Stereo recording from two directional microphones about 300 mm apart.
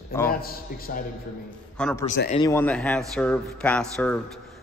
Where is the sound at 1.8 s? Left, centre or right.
Centre.